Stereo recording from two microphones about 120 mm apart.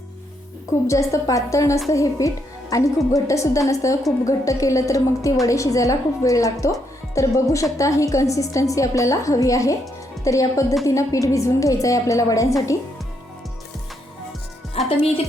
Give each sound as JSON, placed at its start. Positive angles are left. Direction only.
{"t": 0.7, "sound": "a woman's voice", "side_deg": 25}
{"t": 14.8, "sound": "speech", "side_deg": 50}